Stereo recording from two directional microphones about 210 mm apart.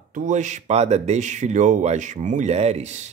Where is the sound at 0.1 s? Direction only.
35° right (ahead or behind).